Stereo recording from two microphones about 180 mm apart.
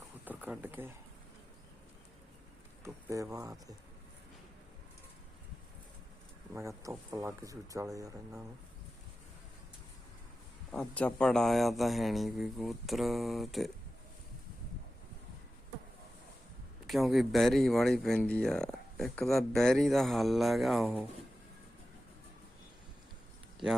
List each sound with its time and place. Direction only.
0.3 s speech: 10° right (ahead or behind)
2.8 s speech: 15° right (ahead or behind)
6.5 s speech: 15° right (ahead or behind)
10.7 s speech: 5° left (ahead or behind)
16.8 s speech: centre (ahead or behind)